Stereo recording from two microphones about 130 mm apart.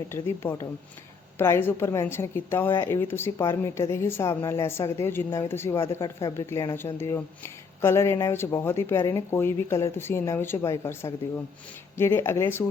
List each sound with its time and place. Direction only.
0.1 s a woman's voice: 20° left (ahead or behind)